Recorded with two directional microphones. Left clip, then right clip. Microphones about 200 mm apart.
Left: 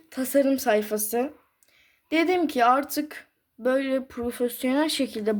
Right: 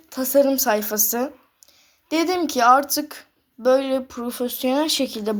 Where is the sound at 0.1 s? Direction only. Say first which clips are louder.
Right 5 dB; 20° left (ahead or behind).